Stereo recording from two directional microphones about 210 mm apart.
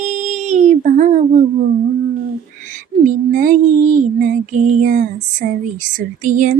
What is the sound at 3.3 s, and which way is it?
Female singing, 40° right (ahead or behind).